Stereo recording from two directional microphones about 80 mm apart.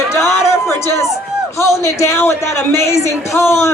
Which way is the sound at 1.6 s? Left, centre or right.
Left.